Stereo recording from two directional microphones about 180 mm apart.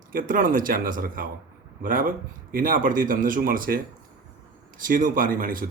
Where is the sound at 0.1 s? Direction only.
50° right (ahead or behind).